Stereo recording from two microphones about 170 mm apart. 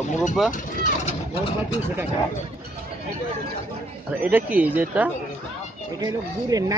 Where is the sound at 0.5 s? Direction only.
50° left (ahead or behind).